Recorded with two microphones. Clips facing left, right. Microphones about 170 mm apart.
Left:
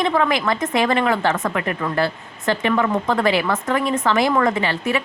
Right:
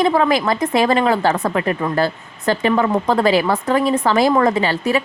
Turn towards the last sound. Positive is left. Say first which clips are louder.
# right 4 dB
turn(degrees=-35)  # may be behind; listen again after turning